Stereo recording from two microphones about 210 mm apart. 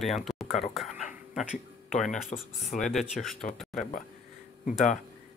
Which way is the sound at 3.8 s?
40° left (ahead or behind).